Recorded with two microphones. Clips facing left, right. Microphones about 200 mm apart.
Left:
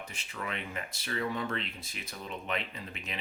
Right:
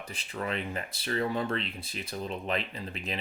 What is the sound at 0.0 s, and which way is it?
Speech, 35° right (ahead or behind).